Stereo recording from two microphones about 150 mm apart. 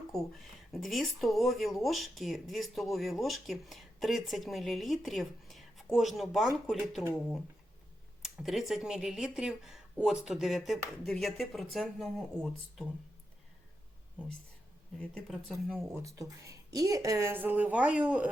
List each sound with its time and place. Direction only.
0.1 s speech: centre (ahead or behind)
8.2 s speech: centre (ahead or behind)
14.9 s speech: 5° left (ahead or behind)
16.0 s speech: 20° right (ahead or behind)